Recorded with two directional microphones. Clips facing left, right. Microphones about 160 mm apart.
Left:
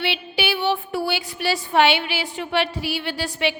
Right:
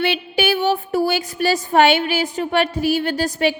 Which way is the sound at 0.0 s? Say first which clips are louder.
Right 5 dB; 50° right (ahead or behind).